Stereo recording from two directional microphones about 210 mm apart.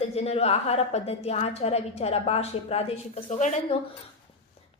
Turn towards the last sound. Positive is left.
turn(degrees=35)  # may be behind; listen again after turning